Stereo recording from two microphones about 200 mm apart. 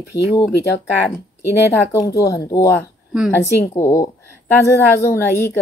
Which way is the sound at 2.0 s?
15° left (ahead or behind).